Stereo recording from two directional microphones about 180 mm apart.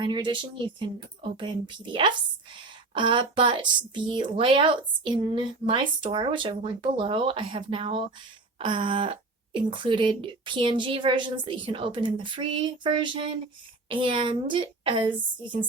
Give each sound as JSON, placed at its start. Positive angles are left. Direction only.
{"t": 0.0, "sound": "speech", "side_deg": -25}
{"t": 1.4, "sound": "speech", "side_deg": -25}